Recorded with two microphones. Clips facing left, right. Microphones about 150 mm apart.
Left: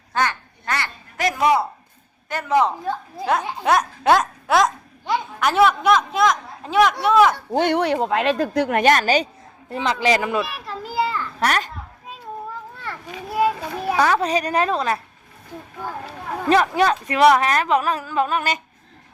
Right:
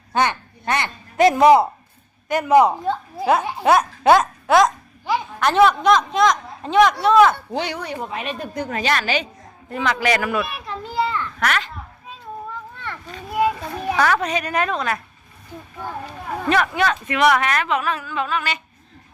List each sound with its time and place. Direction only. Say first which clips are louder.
0.1 s speech: right 2 dB; 20° right (ahead or behind)
2.3 s speech: right 5 dB; 15° right (ahead or behind); by 7.3 s 10° left (ahead or behind)
7.5 s speech: left 6 dB; 50° left (ahead or behind)
8.0 s speech: left 8 dB; 90° left
8.8 s a man's voice: left 4 dB; 45° left (ahead or behind); by 10.4 s 25° left (ahead or behind)
10.4 s children playing: right 1 dB; centre (ahead or behind)
11.3 s a child's voice: left 3 dB; 35° left (ahead or behind)
12.8 s a child's voice: left 1 dB; 10° left (ahead or behind)
14.0 s speech: left 1 dB; 25° left (ahead or behind)
16.5 s speech: left 3 dB; 30° left (ahead or behind)